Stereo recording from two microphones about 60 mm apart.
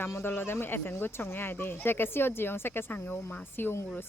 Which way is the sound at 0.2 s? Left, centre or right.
Left.